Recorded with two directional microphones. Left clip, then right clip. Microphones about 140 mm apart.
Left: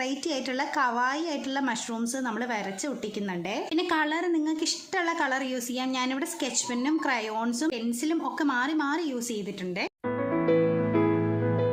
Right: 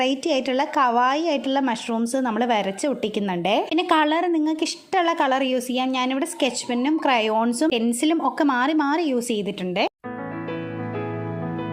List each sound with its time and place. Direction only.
0.0 s a woman's voice: 35° right (ahead or behind)